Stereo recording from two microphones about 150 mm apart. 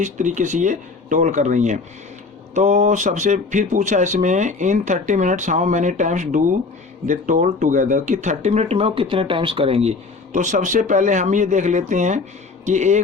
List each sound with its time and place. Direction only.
0.0 s speech: 55° right (ahead or behind); by 9.9 s 40° right (ahead or behind)
10.3 s speech: 55° right (ahead or behind)